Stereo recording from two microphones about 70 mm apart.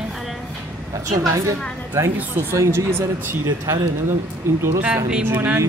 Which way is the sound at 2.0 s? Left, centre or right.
Right.